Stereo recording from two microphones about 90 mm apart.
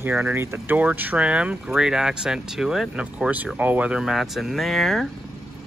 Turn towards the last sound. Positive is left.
turn(degrees=0)  # may be behind; listen again after turning